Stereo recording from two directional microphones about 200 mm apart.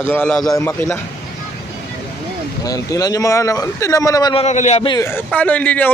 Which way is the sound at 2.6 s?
20° left (ahead or behind).